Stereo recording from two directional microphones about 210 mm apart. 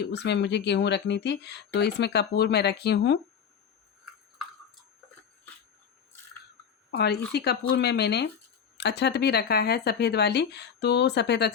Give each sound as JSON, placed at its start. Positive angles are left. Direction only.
{"t": 0.0, "sound": "speech", "side_deg": 55}
{"t": 6.9, "sound": "speech", "side_deg": 50}